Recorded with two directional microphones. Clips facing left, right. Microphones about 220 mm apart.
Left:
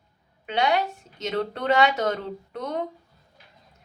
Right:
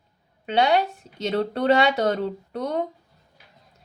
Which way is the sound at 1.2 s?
35° right (ahead or behind).